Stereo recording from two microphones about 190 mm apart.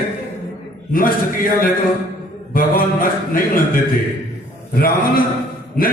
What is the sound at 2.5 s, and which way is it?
A man's voice, 45° left (ahead or behind).